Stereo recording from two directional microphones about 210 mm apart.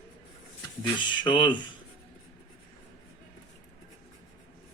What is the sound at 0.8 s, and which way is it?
Speech, 20° left (ahead or behind).